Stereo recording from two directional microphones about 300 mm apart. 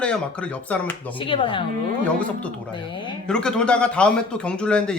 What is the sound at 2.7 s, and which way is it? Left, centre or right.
Speech, centre.